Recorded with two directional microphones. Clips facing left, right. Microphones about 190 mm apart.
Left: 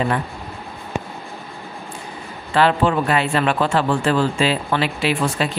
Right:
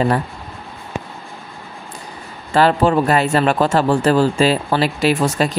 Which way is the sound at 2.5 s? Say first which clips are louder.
Right 3 dB; 40° right (ahead or behind).